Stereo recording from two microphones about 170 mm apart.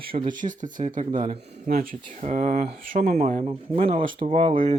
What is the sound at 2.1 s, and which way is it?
Speech, 45° right (ahead or behind).